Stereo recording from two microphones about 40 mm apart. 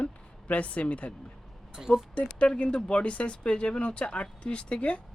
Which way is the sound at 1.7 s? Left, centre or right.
Centre.